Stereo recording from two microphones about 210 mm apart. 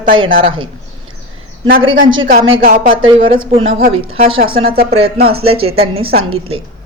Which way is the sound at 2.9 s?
25° right (ahead or behind).